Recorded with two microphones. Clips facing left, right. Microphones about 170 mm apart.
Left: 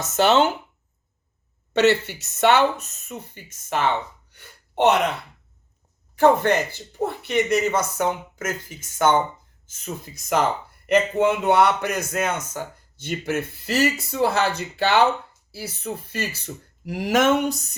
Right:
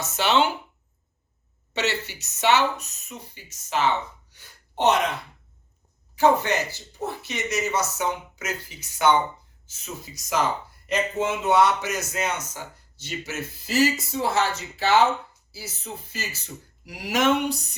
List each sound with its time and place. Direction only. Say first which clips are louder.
0.0 s speech: left 4 dB; 45° left (ahead or behind)
1.7 s speech: left 9 dB; 55° left (ahead or behind)
6.1 s a man's voice: left 3 dB; 50° left (ahead or behind)